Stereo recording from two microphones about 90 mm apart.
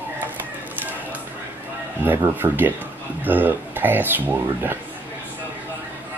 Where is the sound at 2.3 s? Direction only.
20° right (ahead or behind).